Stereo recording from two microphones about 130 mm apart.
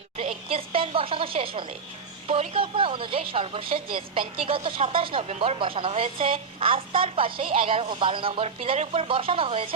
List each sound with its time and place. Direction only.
0.2 s a woman's voice: 45° right (ahead or behind)